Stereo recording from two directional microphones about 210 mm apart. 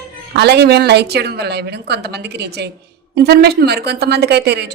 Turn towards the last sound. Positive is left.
turn(degrees=-50)  # may be behind; listen again after turning